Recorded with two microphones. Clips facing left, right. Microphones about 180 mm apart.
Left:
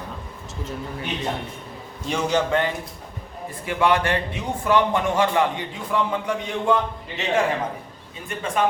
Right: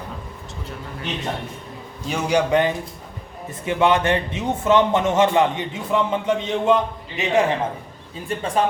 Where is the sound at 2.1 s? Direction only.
10° right (ahead or behind).